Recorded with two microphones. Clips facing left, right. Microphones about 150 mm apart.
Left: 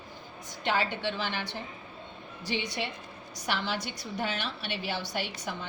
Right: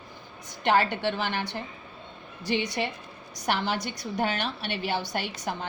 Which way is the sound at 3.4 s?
50° right (ahead or behind).